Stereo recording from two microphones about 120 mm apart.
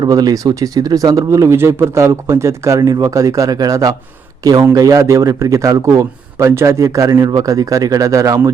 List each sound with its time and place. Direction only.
0.0 s speech: 35° right (ahead or behind)